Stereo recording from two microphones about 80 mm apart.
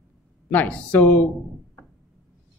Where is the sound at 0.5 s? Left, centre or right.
Left.